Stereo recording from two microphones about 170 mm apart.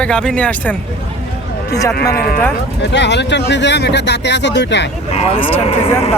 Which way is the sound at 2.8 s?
90° left.